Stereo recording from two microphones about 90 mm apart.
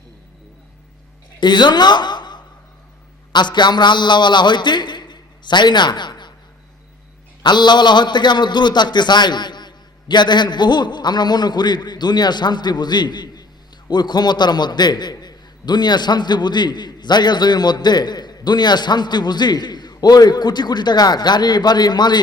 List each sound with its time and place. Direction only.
1.4 s a woman's voice: 55° left (ahead or behind)
7.4 s a man's voice: 55° left (ahead or behind)